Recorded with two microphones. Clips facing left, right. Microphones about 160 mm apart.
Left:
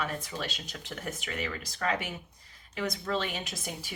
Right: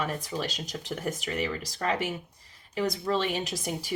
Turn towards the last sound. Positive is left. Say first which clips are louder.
# right 7 dB
turn(degrees=-35)  # may be behind; listen again after turning